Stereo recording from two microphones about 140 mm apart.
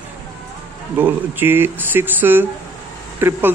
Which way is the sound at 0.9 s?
15° right (ahead or behind).